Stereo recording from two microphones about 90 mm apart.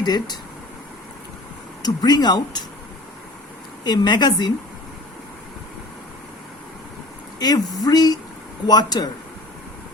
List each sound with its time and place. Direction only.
0.0 s speech: 50° left (ahead or behind)
1.8 s speech: 55° left (ahead or behind)
3.8 s a woman's voice: 55° left (ahead or behind)
7.3 s speech: 45° left (ahead or behind)